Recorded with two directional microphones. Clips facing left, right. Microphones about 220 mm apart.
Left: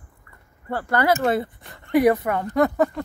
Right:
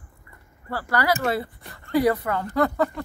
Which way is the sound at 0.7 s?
20° left (ahead or behind).